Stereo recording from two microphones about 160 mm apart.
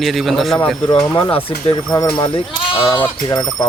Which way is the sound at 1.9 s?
25° left (ahead or behind).